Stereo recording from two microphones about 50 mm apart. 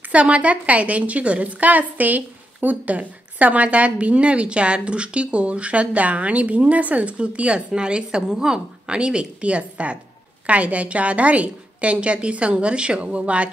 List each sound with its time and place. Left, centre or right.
0.1 s a woman's voice: right